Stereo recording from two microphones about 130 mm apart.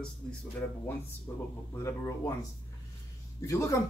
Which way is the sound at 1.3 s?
25° left (ahead or behind).